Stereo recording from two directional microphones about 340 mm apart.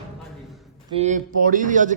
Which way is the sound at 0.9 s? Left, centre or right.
Centre.